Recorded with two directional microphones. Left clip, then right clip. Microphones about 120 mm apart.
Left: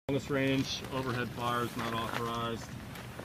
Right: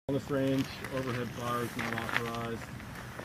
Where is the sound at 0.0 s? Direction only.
30° left (ahead or behind).